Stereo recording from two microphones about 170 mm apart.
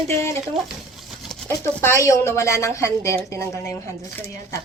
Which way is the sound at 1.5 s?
15° left (ahead or behind).